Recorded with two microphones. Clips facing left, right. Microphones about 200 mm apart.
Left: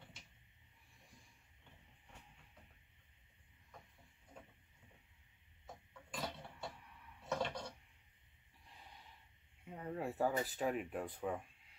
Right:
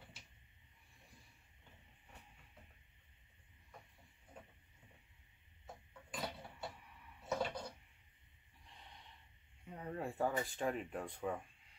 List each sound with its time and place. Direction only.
6.1 s a sound: centre (ahead or behind)
7.2 s dishes: 5° right (ahead or behind)
8.6 s snort: centre (ahead or behind)
9.7 s speech: 5° left (ahead or behind)